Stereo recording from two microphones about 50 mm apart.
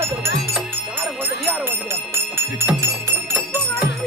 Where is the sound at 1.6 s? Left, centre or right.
Right.